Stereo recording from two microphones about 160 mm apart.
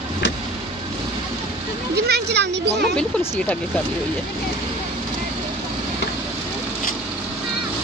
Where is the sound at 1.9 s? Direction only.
90° right.